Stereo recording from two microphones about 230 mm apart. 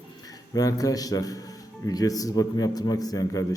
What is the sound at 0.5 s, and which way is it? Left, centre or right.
A man's voice, centre.